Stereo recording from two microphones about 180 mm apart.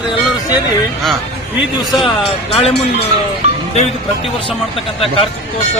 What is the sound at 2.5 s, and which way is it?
Speech, 30° left (ahead or behind).